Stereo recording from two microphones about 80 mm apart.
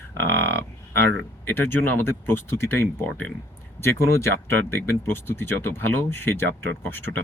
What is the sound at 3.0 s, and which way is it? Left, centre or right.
Speech, centre.